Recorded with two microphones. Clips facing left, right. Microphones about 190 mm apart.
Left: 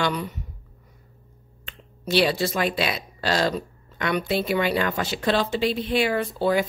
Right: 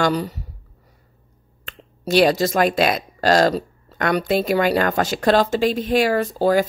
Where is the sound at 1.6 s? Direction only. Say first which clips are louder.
Right 6 dB; 45° right (ahead or behind).